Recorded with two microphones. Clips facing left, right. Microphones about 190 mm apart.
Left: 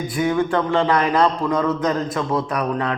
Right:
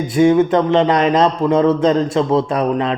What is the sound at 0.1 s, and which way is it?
A man's voice, 25° right (ahead or behind).